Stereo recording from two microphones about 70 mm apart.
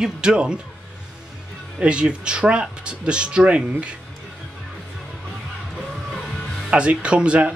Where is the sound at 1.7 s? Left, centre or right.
Centre.